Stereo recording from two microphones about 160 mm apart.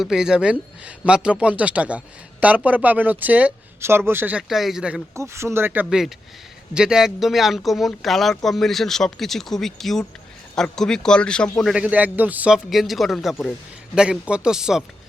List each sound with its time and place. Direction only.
0.0 s speech: 5° right (ahead or behind)
5.1 s speech: 15° right (ahead or behind)
5.8 s a man's voice: centre (ahead or behind)
11.6 s a man's voice: 5° right (ahead or behind)